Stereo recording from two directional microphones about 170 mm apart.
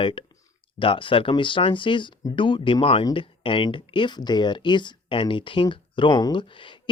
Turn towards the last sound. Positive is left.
turn(degrees=30)  # may be behind; listen again after turning